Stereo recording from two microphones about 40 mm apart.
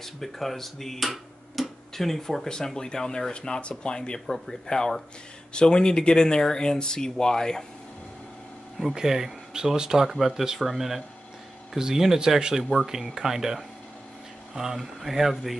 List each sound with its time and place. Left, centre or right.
0.0 s speech: centre
8.9 s speech: centre